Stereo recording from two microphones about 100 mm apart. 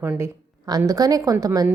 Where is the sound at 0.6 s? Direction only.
40° right (ahead or behind).